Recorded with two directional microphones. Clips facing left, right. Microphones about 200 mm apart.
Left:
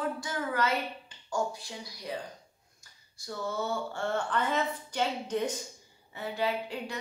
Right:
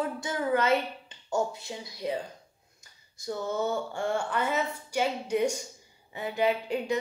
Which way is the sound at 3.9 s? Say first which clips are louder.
Right 2 dB; 10° right (ahead or behind).